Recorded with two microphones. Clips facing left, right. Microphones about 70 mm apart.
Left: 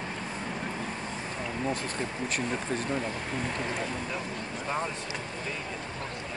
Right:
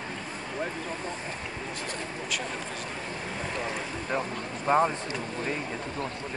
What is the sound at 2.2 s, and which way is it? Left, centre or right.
Speech, left.